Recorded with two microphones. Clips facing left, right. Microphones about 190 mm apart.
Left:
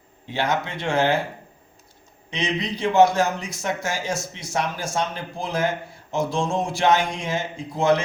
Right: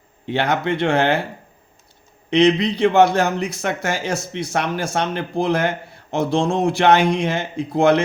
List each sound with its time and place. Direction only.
0.3 s a man's voice: 60° right (ahead or behind)
2.3 s a man's voice: 65° right (ahead or behind)